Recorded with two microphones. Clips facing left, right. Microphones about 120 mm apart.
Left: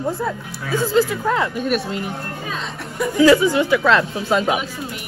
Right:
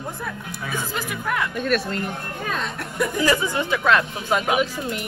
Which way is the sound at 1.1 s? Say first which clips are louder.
Left 6 dB; 25° left (ahead or behind).